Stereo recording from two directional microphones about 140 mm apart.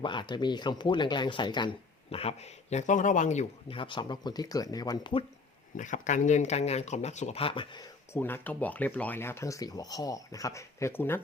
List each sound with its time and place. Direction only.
0.0 s speech: 35° left (ahead or behind); by 3.8 s 55° left (ahead or behind)
3.8 s speech: 35° left (ahead or behind)
5.7 s speech: 65° left (ahead or behind); by 7.9 s 35° left (ahead or behind)
8.1 s speech: 15° left (ahead or behind)